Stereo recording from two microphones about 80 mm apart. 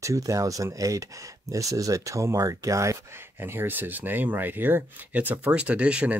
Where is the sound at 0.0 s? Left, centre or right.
Right.